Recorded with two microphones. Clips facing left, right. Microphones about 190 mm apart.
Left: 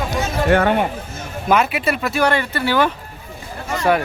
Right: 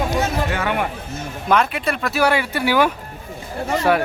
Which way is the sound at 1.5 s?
5° left (ahead or behind).